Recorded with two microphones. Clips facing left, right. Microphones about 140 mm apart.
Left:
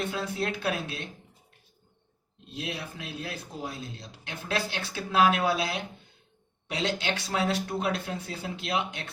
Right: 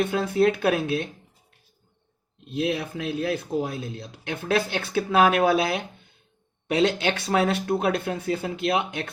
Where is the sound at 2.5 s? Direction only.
60° right (ahead or behind).